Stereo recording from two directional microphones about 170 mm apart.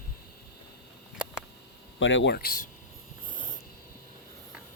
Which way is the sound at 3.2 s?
25° left (ahead or behind).